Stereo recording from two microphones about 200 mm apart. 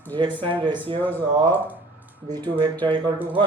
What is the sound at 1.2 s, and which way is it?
Speech, 20° right (ahead or behind).